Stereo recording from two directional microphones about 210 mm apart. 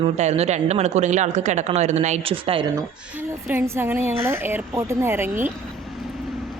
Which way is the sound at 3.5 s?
10° right (ahead or behind).